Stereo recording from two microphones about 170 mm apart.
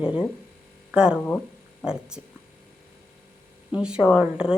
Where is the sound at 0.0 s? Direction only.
5° right (ahead or behind).